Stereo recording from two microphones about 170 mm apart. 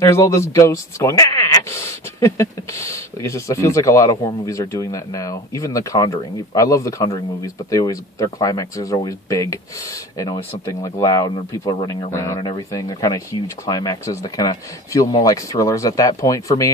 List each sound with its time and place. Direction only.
0.0 s speech: 20° left (ahead or behind)